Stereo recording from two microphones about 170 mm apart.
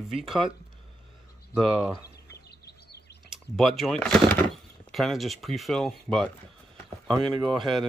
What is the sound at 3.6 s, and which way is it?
Speech, centre (ahead or behind).